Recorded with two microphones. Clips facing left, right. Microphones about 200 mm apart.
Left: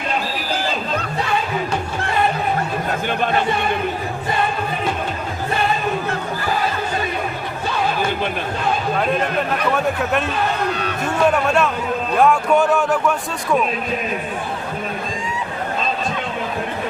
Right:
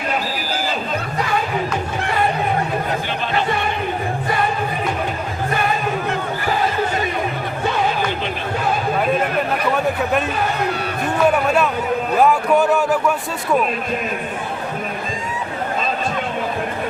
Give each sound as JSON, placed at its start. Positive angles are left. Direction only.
{"t": 9.7, "sound": "a man's voice", "side_deg": 0}